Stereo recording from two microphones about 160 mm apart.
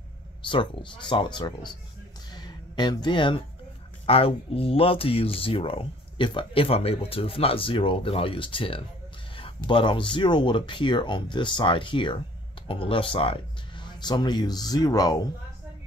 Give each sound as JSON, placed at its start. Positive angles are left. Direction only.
{"t": 0.4, "sound": "speech", "side_deg": 30}
{"t": 2.3, "sound": "a sound", "side_deg": 30}
{"t": 4.0, "sound": "speech", "side_deg": 35}